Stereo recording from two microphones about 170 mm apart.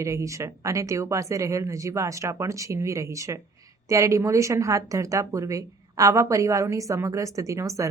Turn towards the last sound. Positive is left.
turn(degrees=-20)  # may be behind; listen again after turning